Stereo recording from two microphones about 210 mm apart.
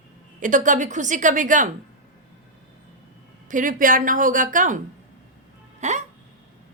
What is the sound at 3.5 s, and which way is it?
A woman's voice, 40° right (ahead or behind).